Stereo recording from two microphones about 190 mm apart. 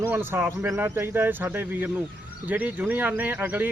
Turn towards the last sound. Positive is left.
turn(degrees=-10)  # may be behind; listen again after turning